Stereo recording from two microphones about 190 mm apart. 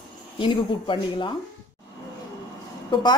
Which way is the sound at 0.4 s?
25° left (ahead or behind).